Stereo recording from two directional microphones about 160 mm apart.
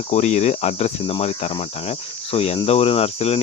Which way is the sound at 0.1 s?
45° left (ahead or behind).